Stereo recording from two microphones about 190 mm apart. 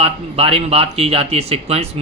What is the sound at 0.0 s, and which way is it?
Speech, 30° right (ahead or behind).